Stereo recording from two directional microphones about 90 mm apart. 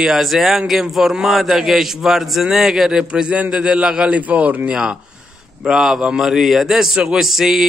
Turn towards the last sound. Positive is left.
turn(degrees=-5)  # may be behind; listen again after turning